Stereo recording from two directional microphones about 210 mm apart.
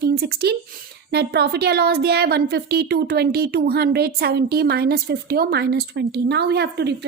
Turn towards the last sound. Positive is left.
turn(degrees=-55)  # may be behind; listen again after turning